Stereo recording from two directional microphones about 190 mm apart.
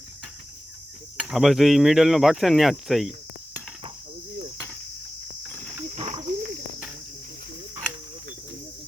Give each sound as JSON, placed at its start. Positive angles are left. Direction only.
{"t": 1.1, "sound": "speech", "side_deg": -5}
{"t": 5.9, "sound": "cricket", "side_deg": -35}